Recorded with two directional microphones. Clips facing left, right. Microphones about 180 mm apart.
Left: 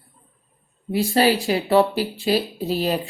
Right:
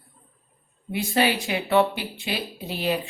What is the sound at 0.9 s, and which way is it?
Speech, 35° left (ahead or behind).